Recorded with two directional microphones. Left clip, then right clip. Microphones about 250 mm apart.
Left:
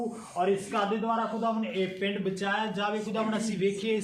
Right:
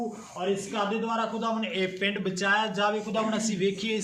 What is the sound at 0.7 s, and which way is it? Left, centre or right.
A man's voice, centre.